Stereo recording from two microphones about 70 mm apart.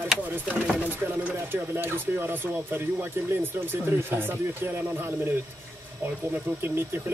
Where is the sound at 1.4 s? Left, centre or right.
Right.